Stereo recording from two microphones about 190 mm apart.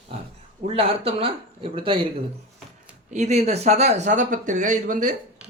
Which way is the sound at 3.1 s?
35° right (ahead or behind).